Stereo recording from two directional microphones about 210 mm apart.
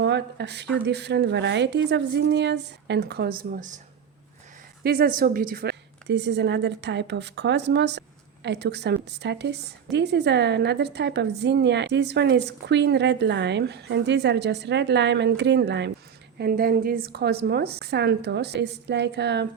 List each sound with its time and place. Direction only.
0.0 s a woman's voice: 55° right (ahead or behind)
4.8 s a woman's voice: 45° right (ahead or behind)
16.4 s a woman's voice: 45° right (ahead or behind)